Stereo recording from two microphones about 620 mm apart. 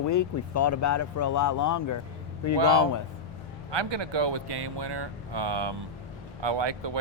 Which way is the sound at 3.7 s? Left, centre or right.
Right.